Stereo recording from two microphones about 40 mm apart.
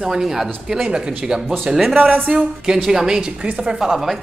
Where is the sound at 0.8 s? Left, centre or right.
Right.